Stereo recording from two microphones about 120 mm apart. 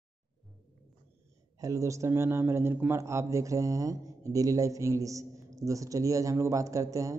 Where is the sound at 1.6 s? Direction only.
25° right (ahead or behind).